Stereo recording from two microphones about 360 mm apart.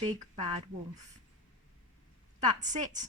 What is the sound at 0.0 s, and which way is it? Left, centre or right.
Speech, centre.